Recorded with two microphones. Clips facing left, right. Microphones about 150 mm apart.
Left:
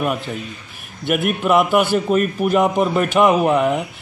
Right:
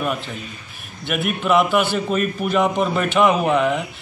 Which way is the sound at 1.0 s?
45° left (ahead or behind).